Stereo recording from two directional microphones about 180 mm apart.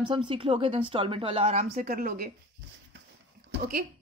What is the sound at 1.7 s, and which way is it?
Speech, 55° right (ahead or behind).